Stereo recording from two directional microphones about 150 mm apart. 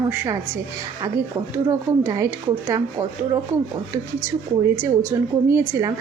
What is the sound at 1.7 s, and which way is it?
Speech, 20° right (ahead or behind).